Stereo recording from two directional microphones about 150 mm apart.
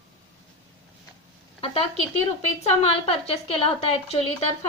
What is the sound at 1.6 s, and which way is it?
A woman's voice, 40° left (ahead or behind).